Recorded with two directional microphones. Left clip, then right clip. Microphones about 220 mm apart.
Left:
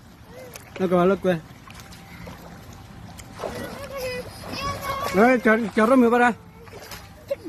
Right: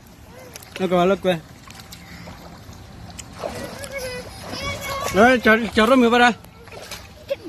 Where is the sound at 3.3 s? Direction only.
5° left (ahead or behind).